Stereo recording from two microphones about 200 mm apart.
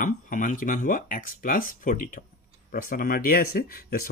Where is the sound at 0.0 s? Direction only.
40° left (ahead or behind).